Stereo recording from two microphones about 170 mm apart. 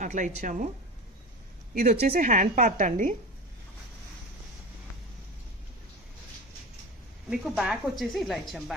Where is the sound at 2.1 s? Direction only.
50° right (ahead or behind).